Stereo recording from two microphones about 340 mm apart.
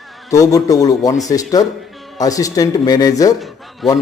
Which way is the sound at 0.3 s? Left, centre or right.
Centre.